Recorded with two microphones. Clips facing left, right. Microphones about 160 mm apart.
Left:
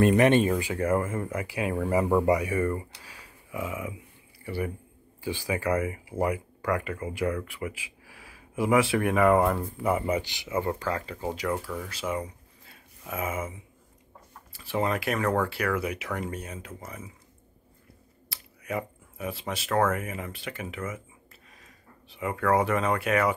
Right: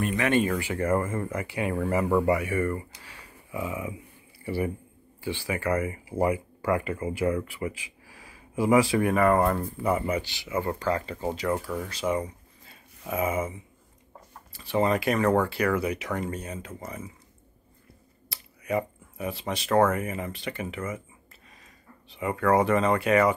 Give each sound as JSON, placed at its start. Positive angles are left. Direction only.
{"t": 0.3, "sound": "speech", "side_deg": 25}
{"t": 0.7, "sound": "speech", "side_deg": 10}
{"t": 5.2, "sound": "speech", "side_deg": 15}
{"t": 10.7, "sound": "speech", "side_deg": 10}
{"t": 11.9, "sound": "a sound", "side_deg": 5}
{"t": 13.1, "sound": "speech", "side_deg": 0}
{"t": 14.5, "sound": "speech", "side_deg": 5}
{"t": 18.3, "sound": "speech", "side_deg": 0}
{"t": 22.1, "sound": "speech", "side_deg": 0}